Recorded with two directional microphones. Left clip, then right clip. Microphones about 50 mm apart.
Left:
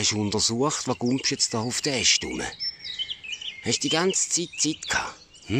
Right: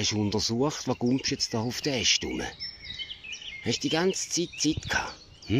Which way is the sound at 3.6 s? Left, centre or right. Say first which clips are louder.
Left 3 dB; left.